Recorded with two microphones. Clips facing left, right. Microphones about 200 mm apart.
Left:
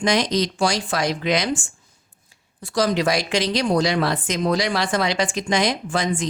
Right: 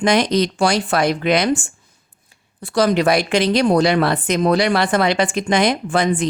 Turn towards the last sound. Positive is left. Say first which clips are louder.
# right 5 dB
turn(degrees=-60)  # may be behind; listen again after turning